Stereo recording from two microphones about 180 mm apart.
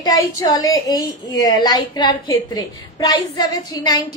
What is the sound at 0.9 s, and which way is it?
A woman's voice, 20° left (ahead or behind).